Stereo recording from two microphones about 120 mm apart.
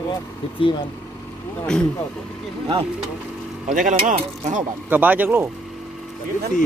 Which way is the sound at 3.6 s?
90° right.